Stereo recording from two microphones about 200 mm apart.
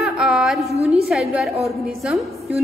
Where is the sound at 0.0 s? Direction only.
Centre (ahead or behind).